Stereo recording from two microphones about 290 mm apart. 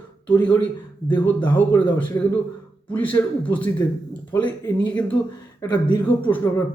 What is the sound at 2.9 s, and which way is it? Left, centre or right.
A man's voice, centre.